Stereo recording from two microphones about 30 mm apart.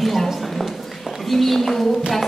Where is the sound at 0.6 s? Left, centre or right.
Centre.